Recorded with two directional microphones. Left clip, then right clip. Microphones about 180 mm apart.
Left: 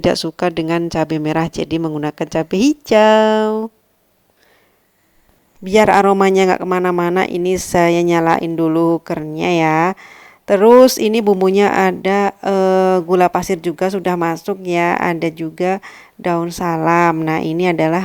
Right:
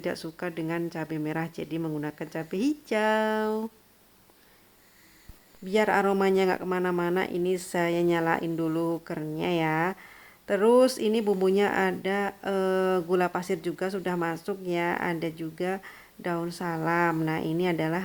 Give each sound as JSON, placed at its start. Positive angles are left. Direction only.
{"t": 0.0, "sound": "speech", "side_deg": 40}
{"t": 5.6, "sound": "speech", "side_deg": 45}